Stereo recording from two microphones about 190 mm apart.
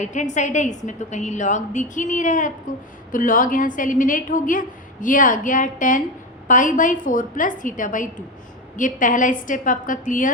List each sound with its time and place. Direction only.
0.0 s a woman's voice: 40° left (ahead or behind)